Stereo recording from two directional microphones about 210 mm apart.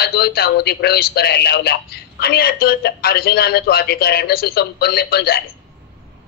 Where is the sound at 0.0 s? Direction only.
50° left (ahead or behind).